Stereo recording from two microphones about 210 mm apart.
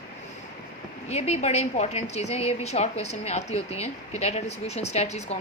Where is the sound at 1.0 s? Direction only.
30° left (ahead or behind).